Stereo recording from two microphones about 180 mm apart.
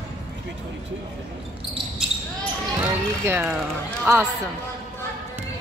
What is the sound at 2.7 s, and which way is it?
Speech, 10° right (ahead or behind).